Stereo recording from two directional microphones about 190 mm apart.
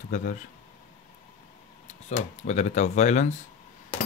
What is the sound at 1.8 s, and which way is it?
Speech, 35° left (ahead or behind).